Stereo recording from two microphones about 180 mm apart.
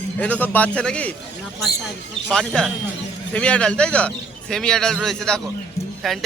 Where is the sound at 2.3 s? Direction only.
5° left (ahead or behind).